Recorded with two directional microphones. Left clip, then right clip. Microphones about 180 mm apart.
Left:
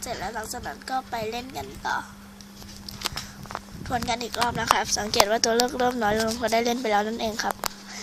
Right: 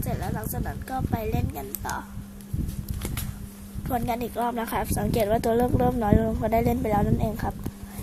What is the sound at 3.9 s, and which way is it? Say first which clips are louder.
A woman's voice: even; 5° right (ahead or behind).